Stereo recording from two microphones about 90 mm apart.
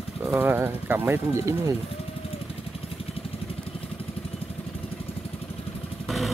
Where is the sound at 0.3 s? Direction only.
25° right (ahead or behind).